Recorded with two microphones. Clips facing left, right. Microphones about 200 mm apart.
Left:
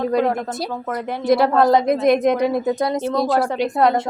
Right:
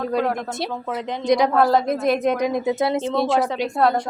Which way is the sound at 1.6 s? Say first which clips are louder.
Left 4 dB; 15° left (ahead or behind).